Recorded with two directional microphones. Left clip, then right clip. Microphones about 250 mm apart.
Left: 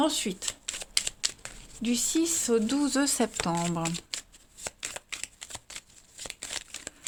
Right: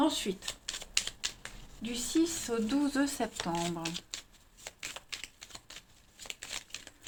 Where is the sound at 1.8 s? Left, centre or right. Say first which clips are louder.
Left 3 dB; left.